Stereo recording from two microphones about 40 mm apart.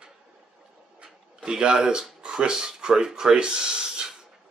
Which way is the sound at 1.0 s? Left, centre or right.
Right.